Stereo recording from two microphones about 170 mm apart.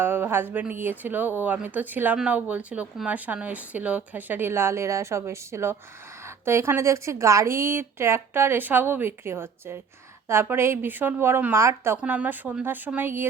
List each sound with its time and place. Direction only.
0.0 s speech: 15° right (ahead or behind)